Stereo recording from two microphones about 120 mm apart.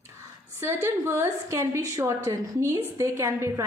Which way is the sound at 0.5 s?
20° right (ahead or behind).